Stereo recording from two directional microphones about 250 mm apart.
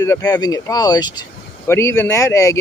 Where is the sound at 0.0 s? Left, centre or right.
Centre.